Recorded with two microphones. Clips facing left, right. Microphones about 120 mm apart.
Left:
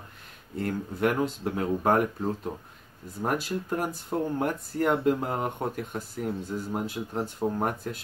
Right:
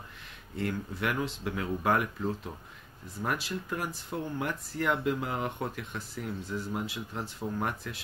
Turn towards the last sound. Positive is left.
turn(degrees=45)  # may be behind; listen again after turning